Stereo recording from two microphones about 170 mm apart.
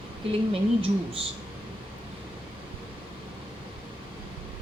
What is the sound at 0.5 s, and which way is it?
Speech, 35° right (ahead or behind).